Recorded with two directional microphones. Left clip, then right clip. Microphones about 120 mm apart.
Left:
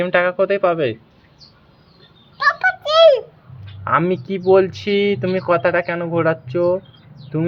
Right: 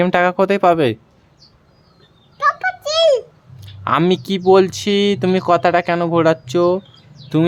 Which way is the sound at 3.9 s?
90° right.